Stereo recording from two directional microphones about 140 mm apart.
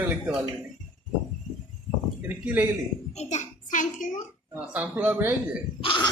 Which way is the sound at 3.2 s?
55° left (ahead or behind).